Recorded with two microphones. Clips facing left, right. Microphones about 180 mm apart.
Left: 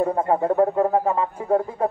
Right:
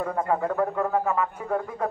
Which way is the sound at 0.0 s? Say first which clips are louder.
Left 5 dB; 30° left (ahead or behind).